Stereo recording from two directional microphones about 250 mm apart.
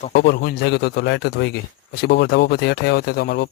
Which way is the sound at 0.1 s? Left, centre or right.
Left.